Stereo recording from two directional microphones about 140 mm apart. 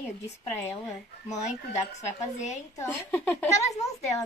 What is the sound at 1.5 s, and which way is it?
Speech, 55° left (ahead or behind).